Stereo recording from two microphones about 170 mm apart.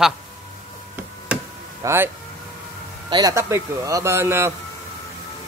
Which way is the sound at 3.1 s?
20° right (ahead or behind).